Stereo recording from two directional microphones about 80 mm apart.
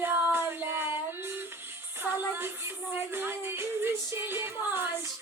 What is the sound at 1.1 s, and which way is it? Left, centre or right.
Music, right.